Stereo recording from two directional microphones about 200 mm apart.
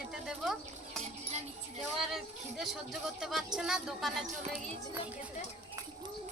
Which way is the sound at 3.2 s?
Centre (ahead or behind).